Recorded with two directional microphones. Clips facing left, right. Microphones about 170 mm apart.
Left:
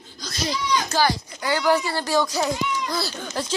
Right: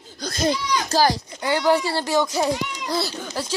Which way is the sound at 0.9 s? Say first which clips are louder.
Right 4 dB; 40° right (ahead or behind).